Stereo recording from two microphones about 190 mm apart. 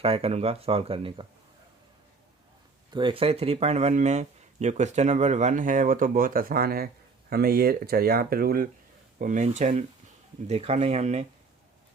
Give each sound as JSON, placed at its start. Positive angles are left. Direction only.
{"t": 0.0, "sound": "speech", "side_deg": -30}
{"t": 2.9, "sound": "speech", "side_deg": -25}